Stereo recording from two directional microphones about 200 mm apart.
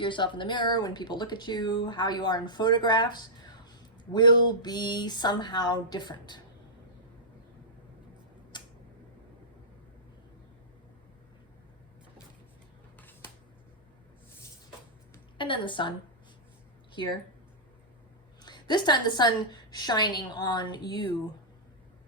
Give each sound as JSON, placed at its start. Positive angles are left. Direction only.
{"t": 0.0, "sound": "speech", "side_deg": 25}
{"t": 8.5, "sound": "tick-tock", "side_deg": 20}
{"t": 15.4, "sound": "speech", "side_deg": 25}
{"t": 18.4, "sound": "speech", "side_deg": 20}